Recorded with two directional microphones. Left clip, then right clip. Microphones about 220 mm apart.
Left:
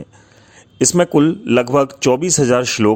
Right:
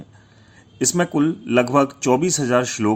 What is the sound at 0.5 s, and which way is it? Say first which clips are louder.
Speech: left 6 dB; 35° left (ahead or behind).